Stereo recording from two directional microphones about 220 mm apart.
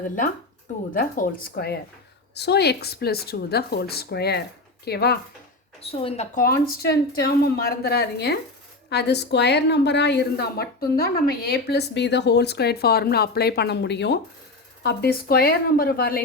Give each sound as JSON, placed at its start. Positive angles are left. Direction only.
{"t": 0.9, "sound": "a woman's voice", "side_deg": 40}
{"t": 5.8, "sound": "a woman's voice", "side_deg": 25}
{"t": 6.3, "sound": "a woman's voice", "side_deg": 40}